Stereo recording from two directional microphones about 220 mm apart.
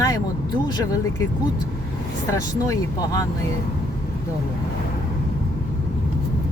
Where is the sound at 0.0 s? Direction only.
15° left (ahead or behind).